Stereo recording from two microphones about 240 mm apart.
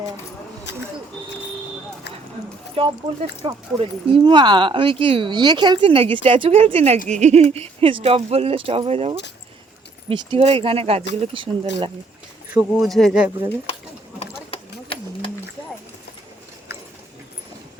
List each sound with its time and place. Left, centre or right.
2.7 s speech: right
12.5 s speech: centre
14.2 s a sound: left